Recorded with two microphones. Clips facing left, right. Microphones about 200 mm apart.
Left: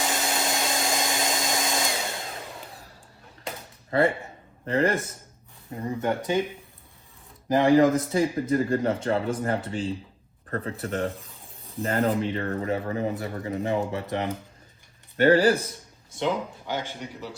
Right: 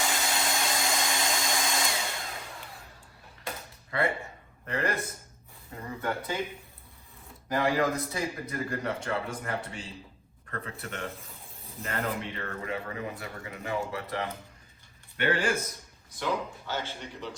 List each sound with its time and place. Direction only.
0.3 s vacuum cleaner: 25° left (ahead or behind)
3.9 s speech: 35° left (ahead or behind); by 6.4 s 20° left (ahead or behind)
7.5 s speech: 25° left (ahead or behind)
13.7 s speech: 20° left (ahead or behind)
15.2 s speech: 40° left (ahead or behind)
16.1 s speech: 20° left (ahead or behind)